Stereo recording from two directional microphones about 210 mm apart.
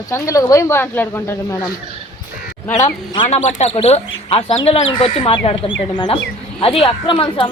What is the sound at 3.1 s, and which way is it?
Speech, 30° left (ahead or behind).